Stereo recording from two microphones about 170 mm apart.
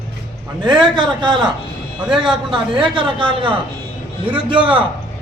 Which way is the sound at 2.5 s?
30° right (ahead or behind).